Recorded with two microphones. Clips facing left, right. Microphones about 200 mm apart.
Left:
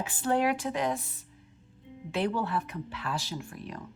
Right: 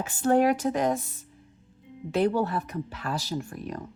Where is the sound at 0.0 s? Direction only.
45° right (ahead or behind).